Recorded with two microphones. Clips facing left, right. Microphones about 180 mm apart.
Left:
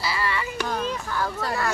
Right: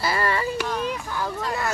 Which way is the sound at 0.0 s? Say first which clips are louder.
Right 4 dB; 50° right (ahead or behind).